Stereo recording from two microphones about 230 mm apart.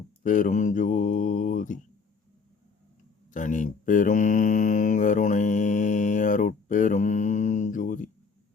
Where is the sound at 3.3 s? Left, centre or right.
Left.